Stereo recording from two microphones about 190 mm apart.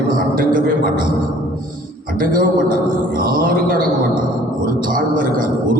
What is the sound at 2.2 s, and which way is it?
A man's voice, 45° right (ahead or behind).